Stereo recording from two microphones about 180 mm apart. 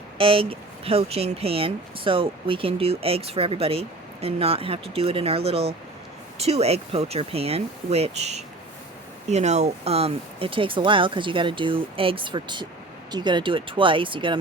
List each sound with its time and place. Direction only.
0.2 s speech: 30° right (ahead or behind)